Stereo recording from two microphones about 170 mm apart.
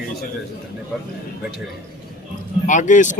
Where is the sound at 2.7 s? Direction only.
45° left (ahead or behind).